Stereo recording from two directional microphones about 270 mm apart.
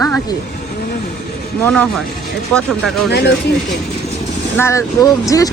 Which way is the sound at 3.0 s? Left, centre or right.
Left.